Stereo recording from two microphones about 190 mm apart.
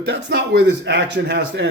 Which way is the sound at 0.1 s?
65° right (ahead or behind).